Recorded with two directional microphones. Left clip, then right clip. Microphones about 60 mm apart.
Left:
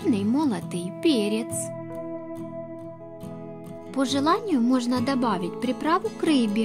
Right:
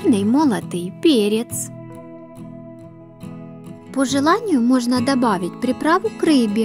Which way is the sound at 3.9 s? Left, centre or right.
Right.